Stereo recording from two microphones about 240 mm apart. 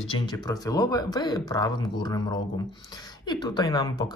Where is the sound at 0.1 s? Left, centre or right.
Centre.